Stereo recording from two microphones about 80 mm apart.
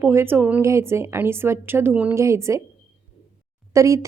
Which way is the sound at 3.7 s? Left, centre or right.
Right.